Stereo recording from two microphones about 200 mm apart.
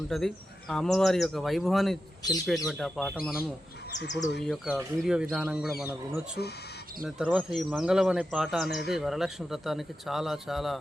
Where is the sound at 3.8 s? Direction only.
55° left (ahead or behind).